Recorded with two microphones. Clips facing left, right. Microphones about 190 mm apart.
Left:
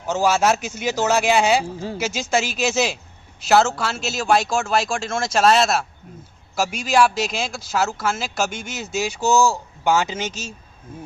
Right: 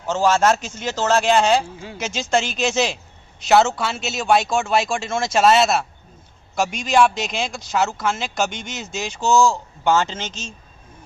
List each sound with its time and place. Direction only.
0.0 s speech: 10° left (ahead or behind)
1.6 s speech: 40° left (ahead or behind)
2.0 s speech: 5° left (ahead or behind)